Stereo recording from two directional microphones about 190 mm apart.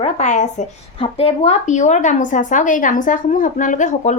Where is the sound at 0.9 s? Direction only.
30° left (ahead or behind).